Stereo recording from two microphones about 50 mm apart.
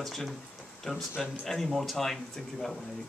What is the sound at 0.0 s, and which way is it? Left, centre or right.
Speech, centre.